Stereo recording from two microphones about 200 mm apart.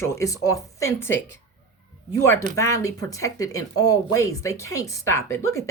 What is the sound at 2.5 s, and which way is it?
Speech, 15° left (ahead or behind).